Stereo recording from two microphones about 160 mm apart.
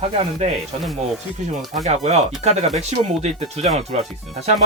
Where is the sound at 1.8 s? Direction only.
45° right (ahead or behind).